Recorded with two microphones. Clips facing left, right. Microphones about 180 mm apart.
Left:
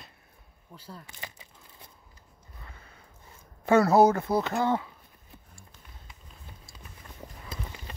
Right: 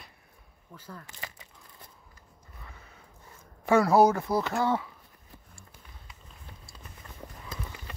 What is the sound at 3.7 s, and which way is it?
Speech, 20° left (ahead or behind).